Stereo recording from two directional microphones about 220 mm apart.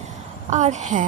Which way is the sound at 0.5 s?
35° right (ahead or behind).